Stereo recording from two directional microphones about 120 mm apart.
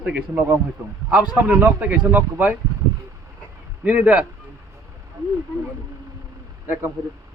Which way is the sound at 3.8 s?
15° right (ahead or behind).